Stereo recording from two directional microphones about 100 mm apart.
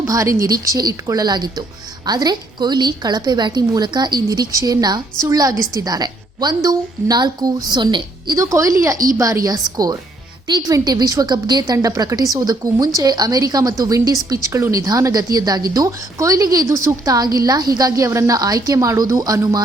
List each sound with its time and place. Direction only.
0.0 s a woman's voice: 35° right (ahead or behind)
8.4 s a woman's voice: 30° right (ahead or behind)